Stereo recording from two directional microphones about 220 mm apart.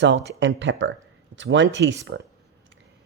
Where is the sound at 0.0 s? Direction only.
50° right (ahead or behind).